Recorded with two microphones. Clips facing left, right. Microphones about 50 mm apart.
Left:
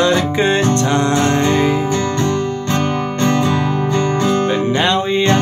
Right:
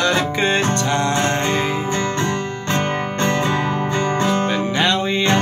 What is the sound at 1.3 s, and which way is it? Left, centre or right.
Music, centre.